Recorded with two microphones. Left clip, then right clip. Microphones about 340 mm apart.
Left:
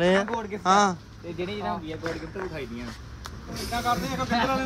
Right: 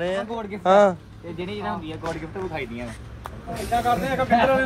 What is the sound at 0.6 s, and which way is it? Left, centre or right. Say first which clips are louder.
Speech: right 5 dB; centre.